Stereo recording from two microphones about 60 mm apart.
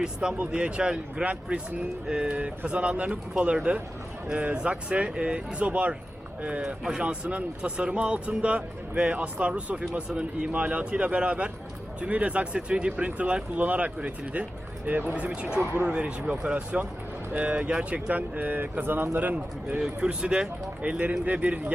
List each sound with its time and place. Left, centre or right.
0.0 s speech: centre
19.8 s speech: centre